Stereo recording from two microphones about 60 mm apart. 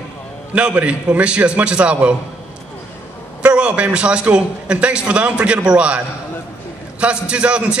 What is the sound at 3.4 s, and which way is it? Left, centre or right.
A man's voice, centre.